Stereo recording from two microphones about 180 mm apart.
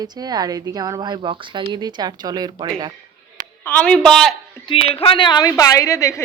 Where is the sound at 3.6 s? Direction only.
10° left (ahead or behind).